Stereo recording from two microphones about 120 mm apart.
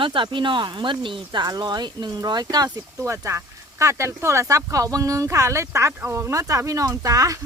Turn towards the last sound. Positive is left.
turn(degrees=-30)  # may be behind; listen again after turning